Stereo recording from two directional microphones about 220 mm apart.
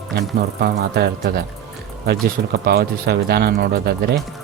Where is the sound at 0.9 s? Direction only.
45° right (ahead or behind).